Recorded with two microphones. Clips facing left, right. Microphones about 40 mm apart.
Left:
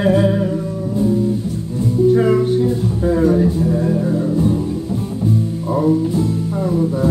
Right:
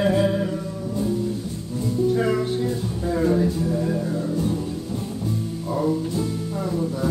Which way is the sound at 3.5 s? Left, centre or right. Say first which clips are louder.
Left 6 dB; left.